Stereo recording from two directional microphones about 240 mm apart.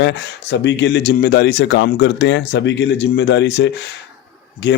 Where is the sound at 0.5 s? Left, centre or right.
Left.